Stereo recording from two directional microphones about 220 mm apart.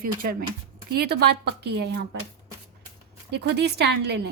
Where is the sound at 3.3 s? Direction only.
50° right (ahead or behind).